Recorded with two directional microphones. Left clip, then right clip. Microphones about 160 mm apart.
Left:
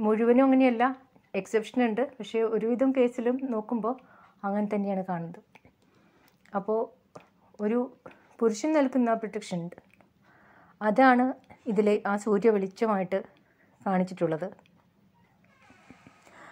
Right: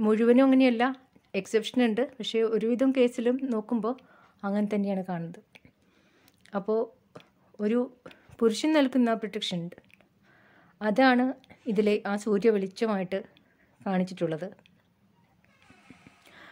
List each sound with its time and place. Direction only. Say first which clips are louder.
0.0 s speech: right 1 dB; 35° right (ahead or behind)
2.8 s a woman's voice: even; 45° right (ahead or behind); by 5.6 s 20° right (ahead or behind)
6.4 s a sound: even; 30° right (ahead or behind)
8.4 s speech: right 1 dB; 45° right (ahead or behind)
9.4 s a woman's voice: right 3 dB; 15° right (ahead or behind)